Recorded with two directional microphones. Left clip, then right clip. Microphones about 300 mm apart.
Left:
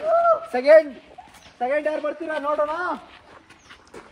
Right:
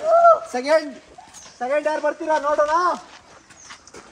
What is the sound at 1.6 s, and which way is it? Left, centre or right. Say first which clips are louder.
Speech: right 2 dB; centre.